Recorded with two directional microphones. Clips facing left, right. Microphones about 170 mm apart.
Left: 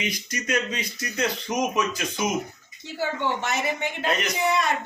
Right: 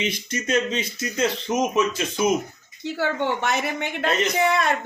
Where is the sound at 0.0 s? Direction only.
25° right (ahead or behind).